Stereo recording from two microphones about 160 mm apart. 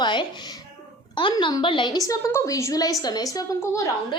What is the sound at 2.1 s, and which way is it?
A woman's voice, 20° left (ahead or behind).